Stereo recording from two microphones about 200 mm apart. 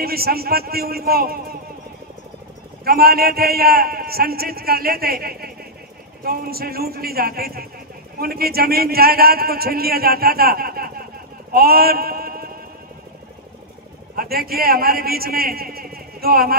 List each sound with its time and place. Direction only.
0.0 s a man's voice: 50° right (ahead or behind)
2.8 s a man's voice: 50° right (ahead or behind)
14.1 s a man's voice: 50° right (ahead or behind)